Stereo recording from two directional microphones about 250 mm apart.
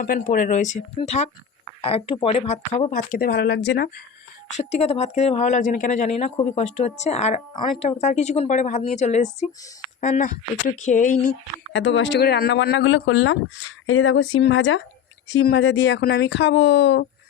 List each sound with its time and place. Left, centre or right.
0.0 s speech: left
4.5 s speech: left
11.7 s speech: left